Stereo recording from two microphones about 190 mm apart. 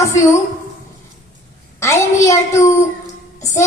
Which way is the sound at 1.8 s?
15° left (ahead or behind).